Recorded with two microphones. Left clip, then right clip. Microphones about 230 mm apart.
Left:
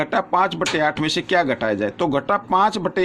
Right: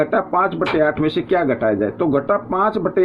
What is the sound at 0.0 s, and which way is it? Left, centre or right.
Speech, left.